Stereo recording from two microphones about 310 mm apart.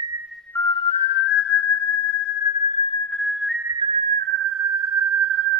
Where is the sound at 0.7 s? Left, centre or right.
Left.